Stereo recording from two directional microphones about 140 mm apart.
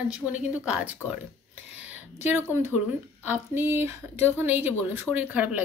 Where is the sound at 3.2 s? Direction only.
15° right (ahead or behind).